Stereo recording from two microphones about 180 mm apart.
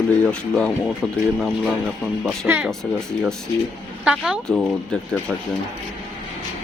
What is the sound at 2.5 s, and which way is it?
Speech, centre (ahead or behind).